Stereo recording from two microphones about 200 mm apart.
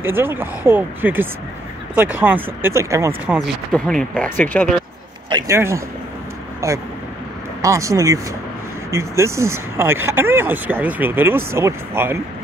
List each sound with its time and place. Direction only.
0.0 s speech: 10° right (ahead or behind)
3.3 s speech: centre (ahead or behind)
5.3 s speech: 15° right (ahead or behind)